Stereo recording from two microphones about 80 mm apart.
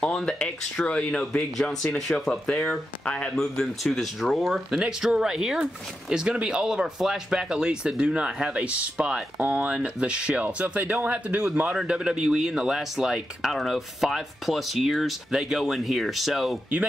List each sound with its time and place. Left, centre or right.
0.0 s speech: centre